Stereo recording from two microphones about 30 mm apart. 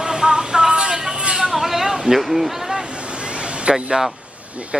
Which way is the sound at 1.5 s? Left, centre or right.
Centre.